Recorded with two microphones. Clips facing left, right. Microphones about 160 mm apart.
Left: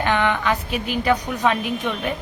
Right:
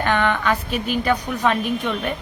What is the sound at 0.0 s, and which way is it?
Speech, 15° left (ahead or behind).